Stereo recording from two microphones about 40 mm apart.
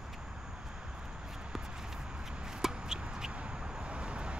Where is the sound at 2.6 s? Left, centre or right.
Centre.